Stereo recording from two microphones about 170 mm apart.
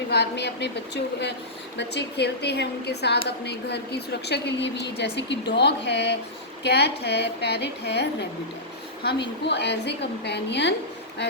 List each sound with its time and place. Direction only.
0.1 s a woman's voice: 80° left
1.9 s a woman's voice: 85° left
6.6 s a woman's voice: 80° left
9.4 s a woman's voice: 80° left